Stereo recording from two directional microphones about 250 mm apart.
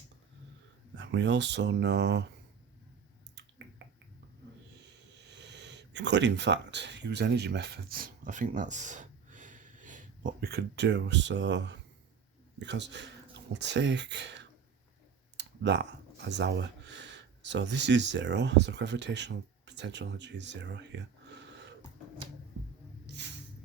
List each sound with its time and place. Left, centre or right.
0.9 s speech: right
5.3 s speech: right
23.0 s a sound: right